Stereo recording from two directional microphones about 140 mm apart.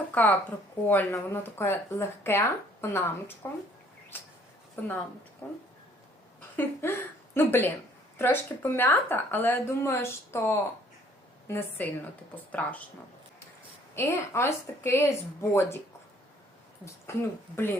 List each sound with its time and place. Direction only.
0.1 s speech: 10° left (ahead or behind)
4.8 s speech: 15° left (ahead or behind)
6.6 s a woman's voice: 15° left (ahead or behind)
13.9 s speech: 20° left (ahead or behind)
16.8 s speech: 20° left (ahead or behind)